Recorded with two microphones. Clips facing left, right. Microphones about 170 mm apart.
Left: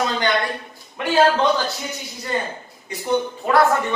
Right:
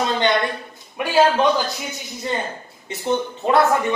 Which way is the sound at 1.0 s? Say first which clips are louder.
Left 1 dB; 15° right (ahead or behind).